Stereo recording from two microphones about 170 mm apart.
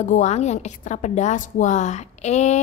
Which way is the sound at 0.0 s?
45° left (ahead or behind).